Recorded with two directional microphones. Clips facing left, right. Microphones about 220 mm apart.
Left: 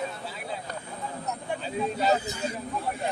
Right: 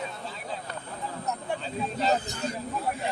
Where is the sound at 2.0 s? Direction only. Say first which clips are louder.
Even; 10° left (ahead or behind).